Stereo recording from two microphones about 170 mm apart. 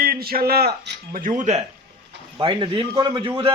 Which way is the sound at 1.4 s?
40° right (ahead or behind).